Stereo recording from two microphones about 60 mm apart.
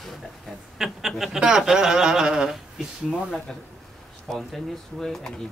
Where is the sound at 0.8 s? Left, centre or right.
Centre.